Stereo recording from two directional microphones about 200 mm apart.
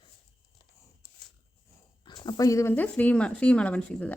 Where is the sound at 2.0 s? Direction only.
20° left (ahead or behind).